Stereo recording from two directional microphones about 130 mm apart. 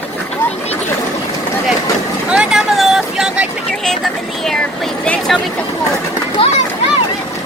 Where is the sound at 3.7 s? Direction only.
5° left (ahead or behind).